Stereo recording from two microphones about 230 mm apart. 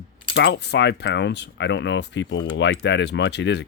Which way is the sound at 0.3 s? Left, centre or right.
Left.